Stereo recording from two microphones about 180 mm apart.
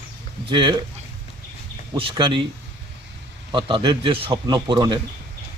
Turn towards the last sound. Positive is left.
turn(degrees=-25)  # may be behind; listen again after turning